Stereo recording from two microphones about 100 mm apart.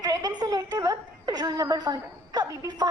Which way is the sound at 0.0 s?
40° right (ahead or behind).